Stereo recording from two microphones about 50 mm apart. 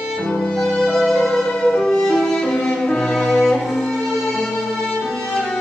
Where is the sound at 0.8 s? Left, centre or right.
Centre.